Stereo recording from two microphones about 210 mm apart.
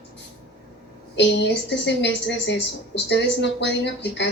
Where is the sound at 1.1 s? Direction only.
55° left (ahead or behind).